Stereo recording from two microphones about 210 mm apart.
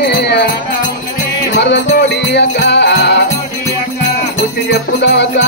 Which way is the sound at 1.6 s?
55° left (ahead or behind).